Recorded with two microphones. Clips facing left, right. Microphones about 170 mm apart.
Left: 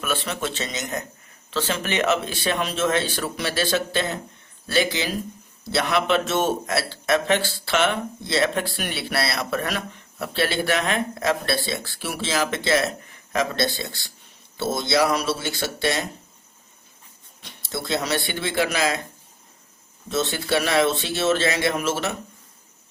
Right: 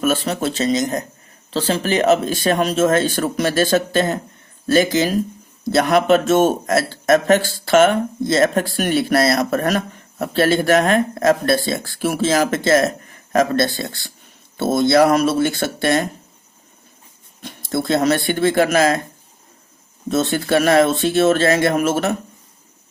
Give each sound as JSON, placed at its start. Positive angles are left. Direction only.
{"t": 0.0, "sound": "speech", "side_deg": -40}
{"t": 17.4, "sound": "speech", "side_deg": -50}
{"t": 20.1, "sound": "speech", "side_deg": -50}